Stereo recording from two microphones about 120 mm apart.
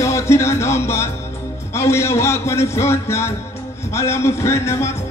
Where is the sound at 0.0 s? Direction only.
25° left (ahead or behind).